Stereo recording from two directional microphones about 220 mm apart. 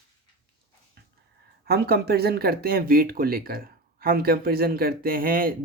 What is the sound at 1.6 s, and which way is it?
Speech, 45° right (ahead or behind).